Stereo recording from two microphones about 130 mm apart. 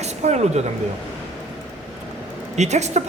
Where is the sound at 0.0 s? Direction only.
60° right (ahead or behind).